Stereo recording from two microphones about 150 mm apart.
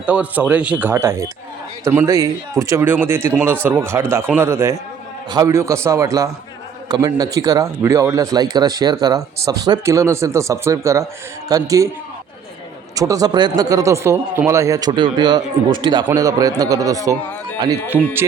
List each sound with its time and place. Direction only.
0.0 s a man's voice: 10° right (ahead or behind)
2.0 s a man's voice: 20° right (ahead or behind)
13.0 s a man's voice: 25° right (ahead or behind)